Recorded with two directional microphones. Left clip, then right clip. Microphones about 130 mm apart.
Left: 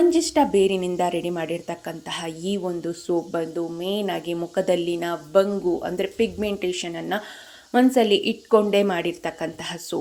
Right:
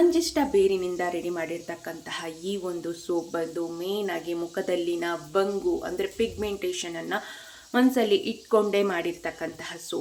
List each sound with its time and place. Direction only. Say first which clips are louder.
0.1 s a woman's voice: left 5 dB; 35° left (ahead or behind)